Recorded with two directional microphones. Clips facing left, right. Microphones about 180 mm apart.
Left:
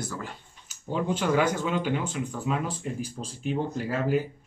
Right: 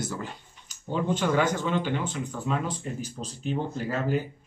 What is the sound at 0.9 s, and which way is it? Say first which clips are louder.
Speech: even; 5° left (ahead or behind).